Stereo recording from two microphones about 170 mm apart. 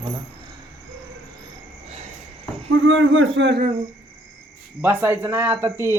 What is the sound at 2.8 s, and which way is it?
Speech, 90° right.